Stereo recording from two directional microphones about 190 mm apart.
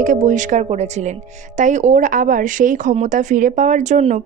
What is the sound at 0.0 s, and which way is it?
A woman's voice, 40° right (ahead or behind).